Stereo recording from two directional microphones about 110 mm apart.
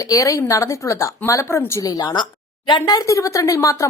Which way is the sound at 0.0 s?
30° left (ahead or behind).